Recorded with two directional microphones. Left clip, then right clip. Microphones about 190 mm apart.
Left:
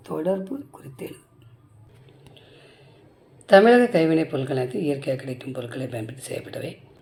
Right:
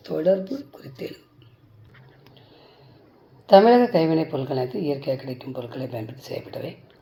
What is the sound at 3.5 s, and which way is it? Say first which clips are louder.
Speech: even; 30° left (ahead or behind).